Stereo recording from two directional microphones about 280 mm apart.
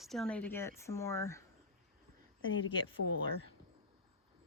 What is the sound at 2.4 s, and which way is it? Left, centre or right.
Speech, left.